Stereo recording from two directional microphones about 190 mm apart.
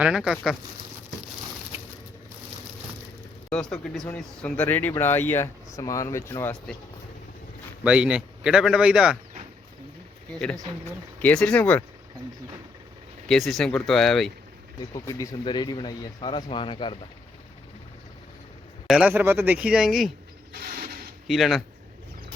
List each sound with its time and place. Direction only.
0.0 s a man's voice: 5° right (ahead or behind)
3.5 s a man's voice: 5° left (ahead or behind)
7.9 s a man's voice: 5° right (ahead or behind)
10.3 s a man's voice: 5° left (ahead or behind)
13.2 s a man's voice: centre (ahead or behind)
14.8 s speech: 15° left (ahead or behind)
18.9 s speech: 5° right (ahead or behind)
20.5 s mechanisms: 50° right (ahead or behind)
21.2 s a man's voice: centre (ahead or behind)